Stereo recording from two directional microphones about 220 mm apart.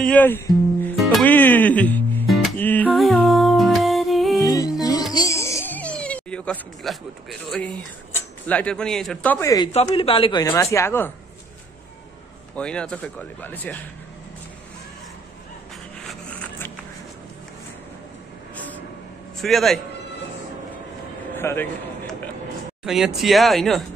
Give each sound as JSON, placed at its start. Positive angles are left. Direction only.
{"t": 0.0, "sound": "speech", "side_deg": 5}
{"t": 0.8, "sound": "music", "side_deg": 5}
{"t": 4.5, "sound": "music", "side_deg": 15}
{"t": 8.5, "sound": "speech", "side_deg": 5}
{"t": 9.7, "sound": "speech", "side_deg": 25}
{"t": 12.5, "sound": "speech", "side_deg": 5}
{"t": 16.1, "sound": "zipper", "side_deg": 5}
{"t": 19.4, "sound": "speech", "side_deg": 0}
{"t": 21.4, "sound": "a sound", "side_deg": 10}
{"t": 22.8, "sound": "speech", "side_deg": 0}